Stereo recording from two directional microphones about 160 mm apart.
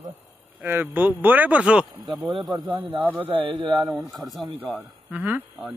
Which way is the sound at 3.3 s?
35° right (ahead or behind).